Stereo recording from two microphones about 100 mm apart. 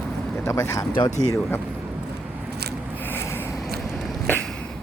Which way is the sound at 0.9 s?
45° left (ahead or behind).